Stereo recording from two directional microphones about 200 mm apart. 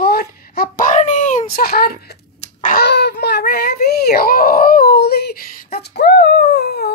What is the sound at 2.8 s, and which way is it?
Baby cry, 55° left (ahead or behind).